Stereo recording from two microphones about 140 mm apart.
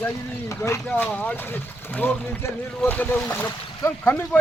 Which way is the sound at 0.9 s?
10° left (ahead or behind).